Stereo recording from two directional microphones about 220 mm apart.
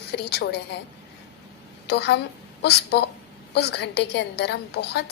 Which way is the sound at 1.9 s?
50° left (ahead or behind).